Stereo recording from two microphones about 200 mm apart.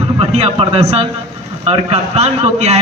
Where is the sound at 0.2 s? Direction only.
30° right (ahead or behind).